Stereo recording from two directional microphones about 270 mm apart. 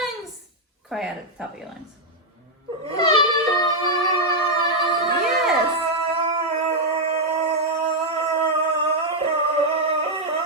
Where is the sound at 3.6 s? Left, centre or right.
Centre.